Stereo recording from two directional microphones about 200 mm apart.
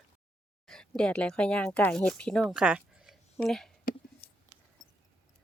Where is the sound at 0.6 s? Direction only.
Centre (ahead or behind).